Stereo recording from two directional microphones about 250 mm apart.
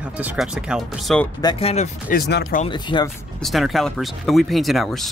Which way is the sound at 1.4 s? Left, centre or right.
Centre.